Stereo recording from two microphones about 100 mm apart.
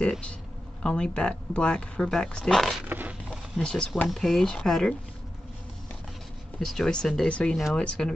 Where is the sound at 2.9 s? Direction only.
15° right (ahead or behind).